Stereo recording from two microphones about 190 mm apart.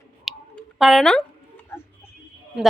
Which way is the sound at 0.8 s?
Centre (ahead or behind).